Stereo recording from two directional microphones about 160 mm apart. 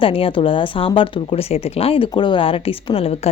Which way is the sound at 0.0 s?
35° left (ahead or behind).